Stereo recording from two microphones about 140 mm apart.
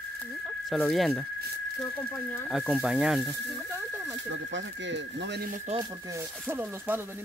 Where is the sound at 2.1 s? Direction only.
15° left (ahead or behind).